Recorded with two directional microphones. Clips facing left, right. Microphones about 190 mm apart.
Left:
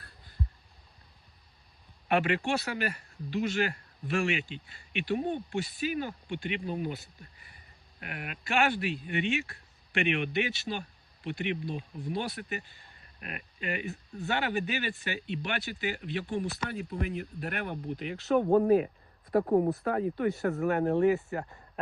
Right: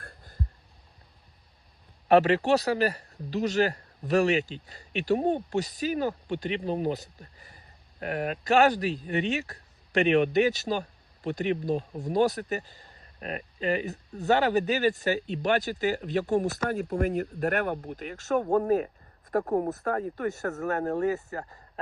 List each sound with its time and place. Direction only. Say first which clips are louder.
2.0 s speech: right 7 dB; 40° right (ahead or behind)